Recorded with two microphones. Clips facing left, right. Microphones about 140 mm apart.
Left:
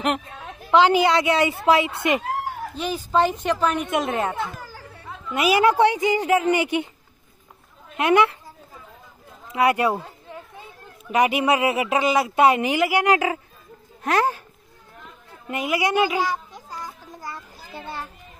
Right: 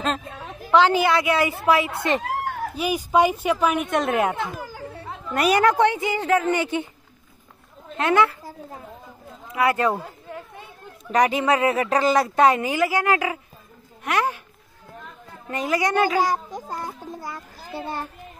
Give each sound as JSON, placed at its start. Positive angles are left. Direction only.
{"t": 0.7, "sound": "a woman's voice", "side_deg": 15}
{"t": 2.7, "sound": "speech", "side_deg": -10}
{"t": 4.1, "sound": "speech", "side_deg": -10}
{"t": 4.4, "sound": "chatter", "side_deg": -15}
{"t": 5.3, "sound": "speech", "side_deg": 5}
{"t": 8.0, "sound": "a woman's voice", "side_deg": 20}
{"t": 9.5, "sound": "speech", "side_deg": 20}
{"t": 9.9, "sound": "speech", "side_deg": -5}
{"t": 14.0, "sound": "a child's voice", "side_deg": 35}
{"t": 15.4, "sound": "speech", "side_deg": 10}
{"t": 16.2, "sound": "speech", "side_deg": -45}
{"t": 17.7, "sound": "speech", "side_deg": -40}